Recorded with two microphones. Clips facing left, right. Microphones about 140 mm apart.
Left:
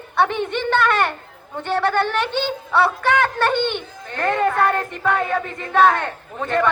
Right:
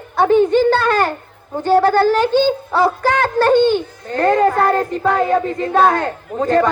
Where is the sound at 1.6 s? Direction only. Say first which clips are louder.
Right 7 dB; 35° right (ahead or behind).